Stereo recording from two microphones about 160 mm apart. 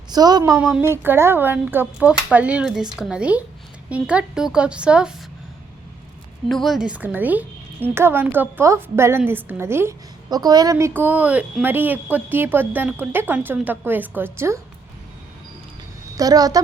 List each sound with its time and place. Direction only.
0.1 s speech: 25° right (ahead or behind)
0.5 s a woman's voice: 5° right (ahead or behind)
0.8 s a woman's voice: 15° right (ahead or behind)
6.5 s a woman's voice: centre (ahead or behind); by 14.6 s 15° right (ahead or behind)
16.1 s a woman's voice: 25° right (ahead or behind)